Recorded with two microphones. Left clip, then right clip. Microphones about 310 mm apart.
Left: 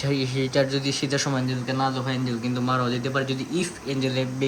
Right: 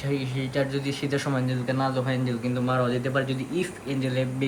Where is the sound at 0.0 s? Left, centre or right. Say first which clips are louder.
Left 4 dB; centre.